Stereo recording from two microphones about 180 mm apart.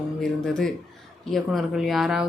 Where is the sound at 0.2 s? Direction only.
5° left (ahead or behind).